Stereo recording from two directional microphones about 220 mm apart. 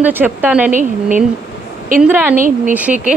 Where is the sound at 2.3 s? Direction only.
40° right (ahead or behind).